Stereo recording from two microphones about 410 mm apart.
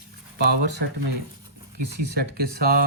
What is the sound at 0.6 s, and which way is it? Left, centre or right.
Speech, right.